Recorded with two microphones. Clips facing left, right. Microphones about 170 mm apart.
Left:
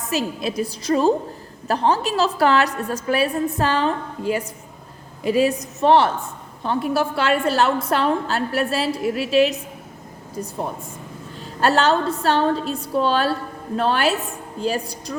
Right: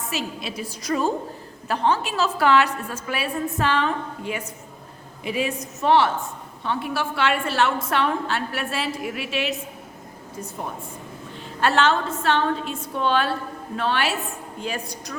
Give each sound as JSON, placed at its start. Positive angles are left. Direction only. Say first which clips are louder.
{"t": 0.1, "sound": "a woman's voice", "louder": "left 9 dB", "side_deg": 40}
{"t": 0.8, "sound": "a woman's voice", "louder": "left 5 dB", "side_deg": 30}